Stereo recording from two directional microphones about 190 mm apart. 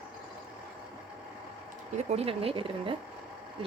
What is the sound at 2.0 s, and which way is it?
Speech, 30° right (ahead or behind).